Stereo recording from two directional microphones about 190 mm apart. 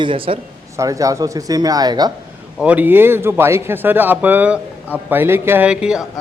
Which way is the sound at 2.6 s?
10° right (ahead or behind).